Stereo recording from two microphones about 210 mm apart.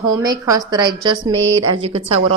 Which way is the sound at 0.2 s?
20° right (ahead or behind).